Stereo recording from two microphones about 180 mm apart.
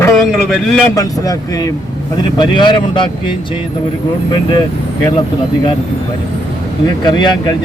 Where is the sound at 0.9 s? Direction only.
20° left (ahead or behind).